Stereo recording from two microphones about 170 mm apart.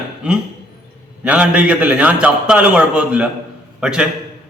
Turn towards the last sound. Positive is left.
turn(degrees=-5)  # may be behind; listen again after turning